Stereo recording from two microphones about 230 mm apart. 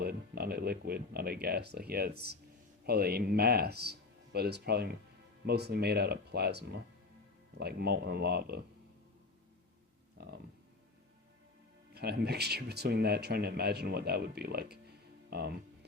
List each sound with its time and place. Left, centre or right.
0.0 s speech: right
10.2 s speech: right
11.9 s speech: right
15.3 s music: right